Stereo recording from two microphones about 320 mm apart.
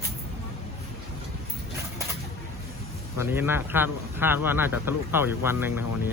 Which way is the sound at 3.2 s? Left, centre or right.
Centre.